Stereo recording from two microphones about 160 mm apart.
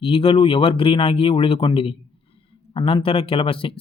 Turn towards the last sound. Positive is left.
turn(degrees=35)  # may be behind; listen again after turning